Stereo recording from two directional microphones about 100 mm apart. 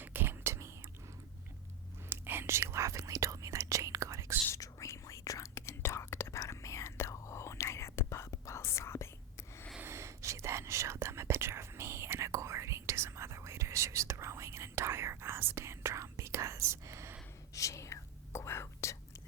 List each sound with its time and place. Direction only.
0.0 s whispering: 20° right (ahead or behind)
2.0 s whispering: 20° right (ahead or behind)
4.4 s whispering: 30° left (ahead or behind)
9.8 s whispering: 30° right (ahead or behind)
17.5 s whispering: 30° left (ahead or behind)